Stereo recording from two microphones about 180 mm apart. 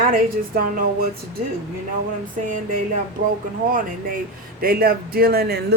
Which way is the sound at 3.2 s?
50° right (ahead or behind).